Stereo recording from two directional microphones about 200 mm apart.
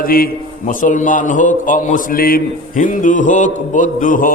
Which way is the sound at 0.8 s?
40° left (ahead or behind).